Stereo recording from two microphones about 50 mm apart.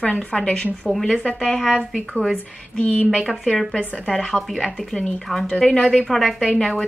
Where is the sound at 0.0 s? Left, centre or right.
Left.